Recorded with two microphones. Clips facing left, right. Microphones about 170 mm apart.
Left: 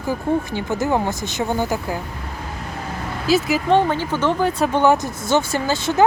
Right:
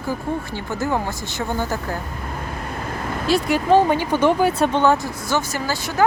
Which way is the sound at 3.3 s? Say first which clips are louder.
Even; centre (ahead or behind).